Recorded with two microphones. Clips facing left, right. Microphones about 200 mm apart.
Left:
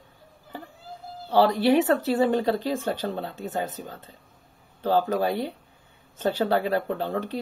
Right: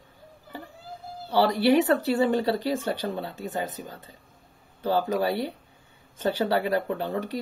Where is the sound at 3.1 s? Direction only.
10° right (ahead or behind).